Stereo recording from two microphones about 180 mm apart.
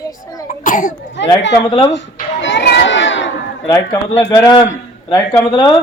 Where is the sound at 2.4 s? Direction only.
80° left.